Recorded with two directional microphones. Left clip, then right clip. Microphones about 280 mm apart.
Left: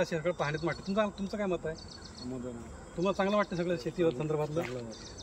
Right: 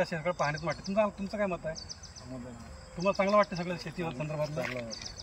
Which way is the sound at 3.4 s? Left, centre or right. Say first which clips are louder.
Even; centre.